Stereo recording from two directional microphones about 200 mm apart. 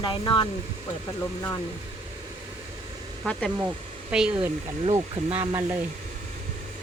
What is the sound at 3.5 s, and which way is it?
Speech, 10° right (ahead or behind).